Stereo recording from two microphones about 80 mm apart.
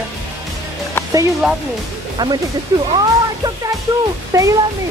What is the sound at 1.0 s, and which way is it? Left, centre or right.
Music, left.